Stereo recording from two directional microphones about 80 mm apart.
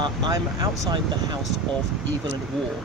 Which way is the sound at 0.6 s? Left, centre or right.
Right.